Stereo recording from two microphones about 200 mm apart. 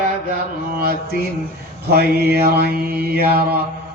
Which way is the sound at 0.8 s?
50° right (ahead or behind).